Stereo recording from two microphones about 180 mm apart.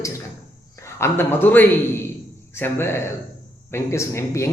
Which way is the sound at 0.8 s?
15° left (ahead or behind).